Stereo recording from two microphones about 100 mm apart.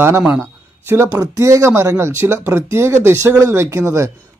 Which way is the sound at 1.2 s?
35° right (ahead or behind).